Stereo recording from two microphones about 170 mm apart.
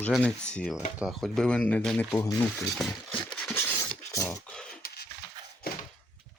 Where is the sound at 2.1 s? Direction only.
15° left (ahead or behind).